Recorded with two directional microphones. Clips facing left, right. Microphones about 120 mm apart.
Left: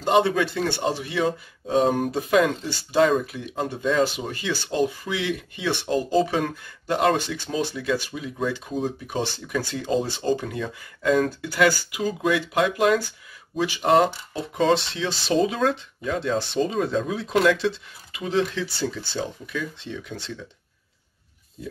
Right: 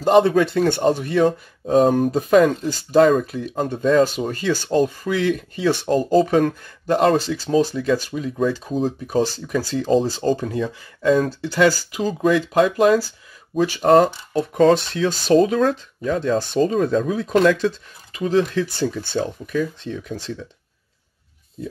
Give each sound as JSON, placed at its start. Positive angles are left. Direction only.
{"t": 0.0, "sound": "speech", "side_deg": -40}
{"t": 10.7, "sound": "speech", "side_deg": -30}